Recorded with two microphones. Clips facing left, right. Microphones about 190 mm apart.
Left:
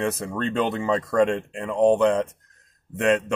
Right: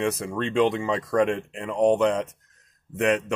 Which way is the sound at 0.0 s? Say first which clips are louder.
Even; centre (ahead or behind).